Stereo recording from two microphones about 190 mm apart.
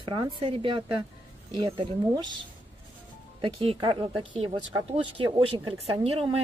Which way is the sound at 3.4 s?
30° right (ahead or behind).